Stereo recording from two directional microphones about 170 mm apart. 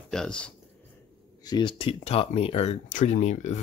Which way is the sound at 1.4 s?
30° left (ahead or behind).